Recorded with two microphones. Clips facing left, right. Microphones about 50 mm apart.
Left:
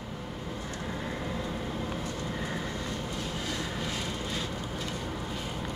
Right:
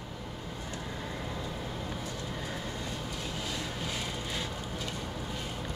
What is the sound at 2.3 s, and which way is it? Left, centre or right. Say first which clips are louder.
Train: left 4 dB; left.